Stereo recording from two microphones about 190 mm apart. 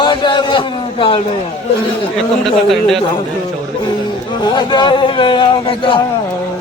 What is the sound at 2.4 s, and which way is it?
Speech, centre (ahead or behind).